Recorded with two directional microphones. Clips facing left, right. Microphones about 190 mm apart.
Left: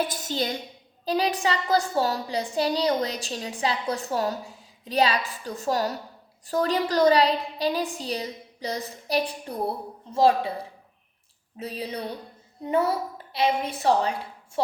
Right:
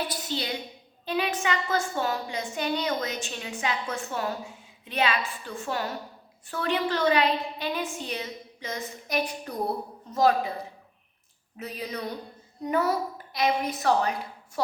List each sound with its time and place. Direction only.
0.1 s a sound: 45° left (ahead or behind)
1.0 s a woman's voice: 35° left (ahead or behind)
11.5 s a woman's voice: 30° left (ahead or behind)